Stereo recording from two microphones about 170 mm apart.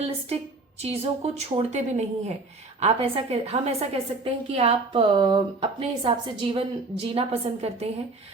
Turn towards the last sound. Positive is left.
turn(degrees=-40)  # may be behind; listen again after turning